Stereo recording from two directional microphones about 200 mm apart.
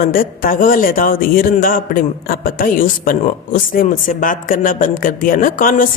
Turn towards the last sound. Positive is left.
turn(degrees=45)  # may be behind; listen again after turning